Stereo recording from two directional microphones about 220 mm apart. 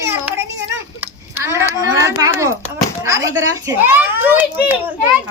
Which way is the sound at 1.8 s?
15° right (ahead or behind).